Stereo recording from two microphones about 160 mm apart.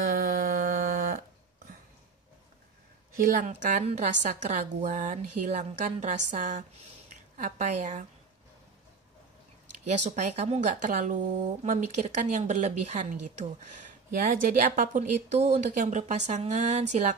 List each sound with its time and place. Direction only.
0.1 s music: 70° right (ahead or behind)
3.2 s a woman's voice: 55° right (ahead or behind)
9.8 s a woman's voice: 45° right (ahead or behind)